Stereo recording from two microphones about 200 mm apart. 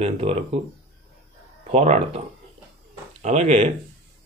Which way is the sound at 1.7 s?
30° right (ahead or behind).